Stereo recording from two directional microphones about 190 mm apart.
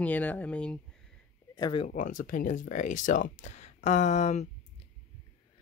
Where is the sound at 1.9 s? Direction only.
45° left (ahead or behind).